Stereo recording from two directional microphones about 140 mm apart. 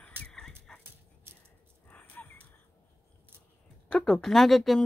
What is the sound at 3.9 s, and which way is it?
Speech, centre (ahead or behind).